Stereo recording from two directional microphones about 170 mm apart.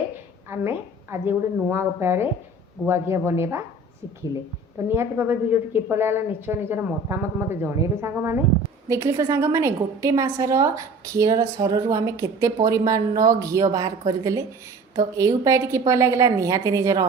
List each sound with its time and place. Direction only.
0.5 s a woman's voice: 15° right (ahead or behind)
4.9 s a woman's voice: 15° right (ahead or behind)